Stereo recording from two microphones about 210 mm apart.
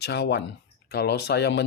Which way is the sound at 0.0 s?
55° left (ahead or behind).